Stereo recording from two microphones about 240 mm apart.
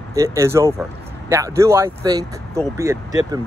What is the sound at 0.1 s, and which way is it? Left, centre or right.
Speech, centre.